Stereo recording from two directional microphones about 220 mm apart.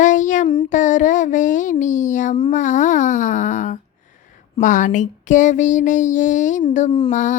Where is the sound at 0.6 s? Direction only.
35° left (ahead or behind).